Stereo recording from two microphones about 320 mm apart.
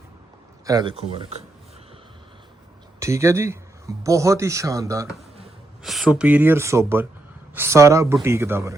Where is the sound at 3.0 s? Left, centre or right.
Centre.